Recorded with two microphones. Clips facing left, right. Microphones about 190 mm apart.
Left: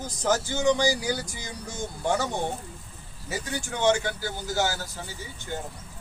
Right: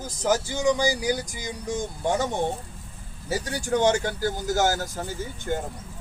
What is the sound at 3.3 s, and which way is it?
A man's voice, 35° right (ahead or behind).